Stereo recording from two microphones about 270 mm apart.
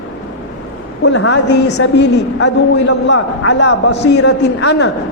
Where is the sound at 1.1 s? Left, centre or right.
Left.